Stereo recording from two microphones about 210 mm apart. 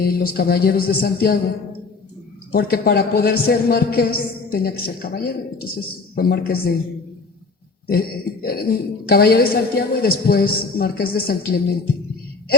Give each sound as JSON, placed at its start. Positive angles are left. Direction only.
{"t": 0.0, "sound": "a woman's voice", "side_deg": 45}
{"t": 2.5, "sound": "a woman's voice", "side_deg": 45}
{"t": 7.9, "sound": "a woman's voice", "side_deg": 45}